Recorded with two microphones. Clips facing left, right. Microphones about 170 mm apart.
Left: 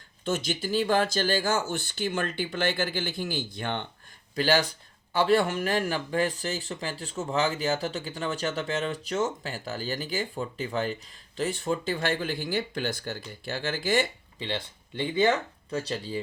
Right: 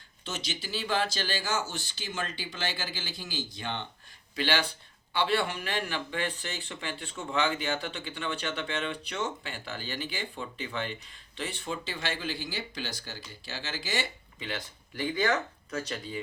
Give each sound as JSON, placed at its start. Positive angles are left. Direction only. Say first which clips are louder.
{"t": 0.3, "sound": "speech", "louder": "left 9 dB", "side_deg": 50}
{"t": 4.4, "sound": "speech", "louder": "left 5 dB", "side_deg": 40}
{"t": 14.3, "sound": "speech", "louder": "left 5 dB", "side_deg": 30}